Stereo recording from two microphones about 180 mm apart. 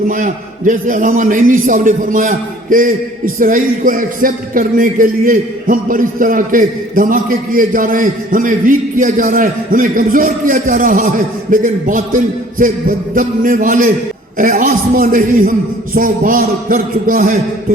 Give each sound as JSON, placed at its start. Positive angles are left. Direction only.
{"t": 0.1, "sound": "a man's voice", "side_deg": -45}